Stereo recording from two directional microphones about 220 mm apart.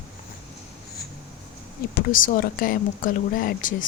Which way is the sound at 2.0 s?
40° left (ahead or behind).